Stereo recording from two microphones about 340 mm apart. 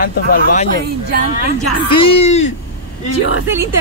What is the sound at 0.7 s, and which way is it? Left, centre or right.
Speech, right.